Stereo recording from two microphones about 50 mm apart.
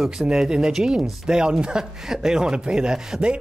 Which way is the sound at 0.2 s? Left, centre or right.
Centre.